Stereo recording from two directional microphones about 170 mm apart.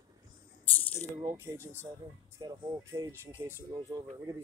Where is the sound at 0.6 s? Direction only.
10° left (ahead or behind).